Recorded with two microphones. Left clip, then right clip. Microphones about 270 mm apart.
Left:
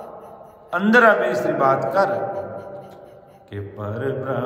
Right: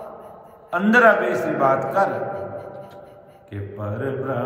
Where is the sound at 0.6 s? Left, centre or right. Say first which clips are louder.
Even; centre.